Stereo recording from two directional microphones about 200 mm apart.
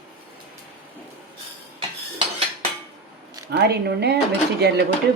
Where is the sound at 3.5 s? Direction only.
55° right (ahead or behind).